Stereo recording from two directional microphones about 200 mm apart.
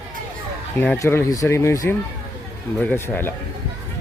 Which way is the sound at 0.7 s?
10° left (ahead or behind).